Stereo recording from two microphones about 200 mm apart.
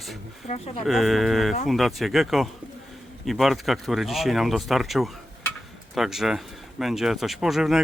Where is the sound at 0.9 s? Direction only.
Centre (ahead or behind).